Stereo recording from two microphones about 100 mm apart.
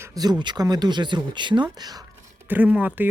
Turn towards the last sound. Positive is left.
turn(degrees=-15)  # may be behind; listen again after turning